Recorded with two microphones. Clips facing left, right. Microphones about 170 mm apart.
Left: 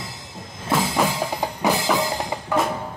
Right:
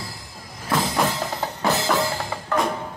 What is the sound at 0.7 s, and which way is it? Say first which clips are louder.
Music: left 1 dB; 10° left (ahead or behind).